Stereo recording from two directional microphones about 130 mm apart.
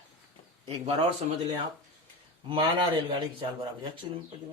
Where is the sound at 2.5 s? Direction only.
40° right (ahead or behind).